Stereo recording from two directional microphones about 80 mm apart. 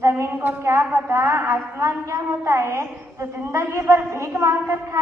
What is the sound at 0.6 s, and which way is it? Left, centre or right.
A woman's voice, right.